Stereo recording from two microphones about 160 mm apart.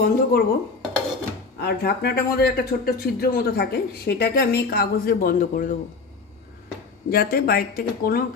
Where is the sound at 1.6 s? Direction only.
80° left; by 5.8 s 60° left (ahead or behind).